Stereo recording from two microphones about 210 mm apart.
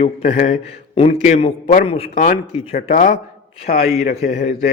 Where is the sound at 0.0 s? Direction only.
30° left (ahead or behind).